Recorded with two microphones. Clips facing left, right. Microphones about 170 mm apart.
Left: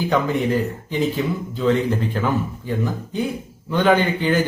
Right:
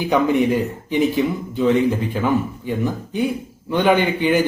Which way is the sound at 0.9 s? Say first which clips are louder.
Right 6 dB; 15° right (ahead or behind).